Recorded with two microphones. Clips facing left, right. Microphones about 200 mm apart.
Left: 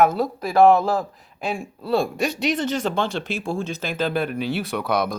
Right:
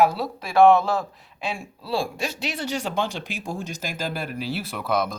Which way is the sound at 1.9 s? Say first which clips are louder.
Left 5 dB; centre (ahead or behind).